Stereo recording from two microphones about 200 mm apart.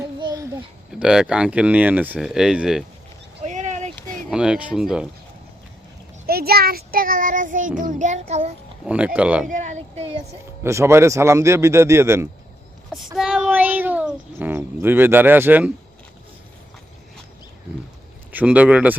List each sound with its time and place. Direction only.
0.2 s a sound: 20° right (ahead or behind)
0.9 s speech: 5° right (ahead or behind)
3.4 s a sound: 35° right (ahead or behind)
4.3 s speech: 5° right (ahead or behind)
6.2 s child singing: 50° right (ahead or behind); by 8.5 s 35° right (ahead or behind)
8.9 s a man's voice: 5° right (ahead or behind)
9.5 s child singing: 35° right (ahead or behind)
10.6 s a man's voice: 15° right (ahead or behind)
13.1 s speech: centre (ahead or behind)
18.3 s a man's voice: 5° right (ahead or behind)